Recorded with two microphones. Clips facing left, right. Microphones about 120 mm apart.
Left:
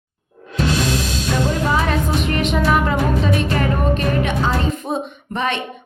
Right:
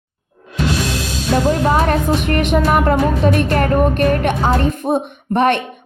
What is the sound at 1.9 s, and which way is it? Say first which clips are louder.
A woman's voice: right 4 dB; 55° right (ahead or behind).